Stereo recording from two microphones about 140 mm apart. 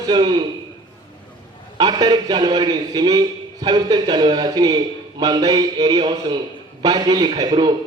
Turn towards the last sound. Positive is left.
turn(degrees=-35)  # may be behind; listen again after turning